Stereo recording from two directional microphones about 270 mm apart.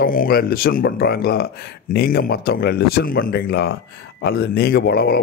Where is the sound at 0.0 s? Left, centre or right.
Left.